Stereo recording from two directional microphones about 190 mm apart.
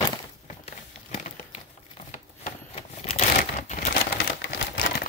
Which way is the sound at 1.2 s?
40° left (ahead or behind).